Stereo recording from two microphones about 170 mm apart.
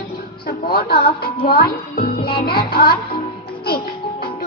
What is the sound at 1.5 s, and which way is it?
Speech, 60° left (ahead or behind).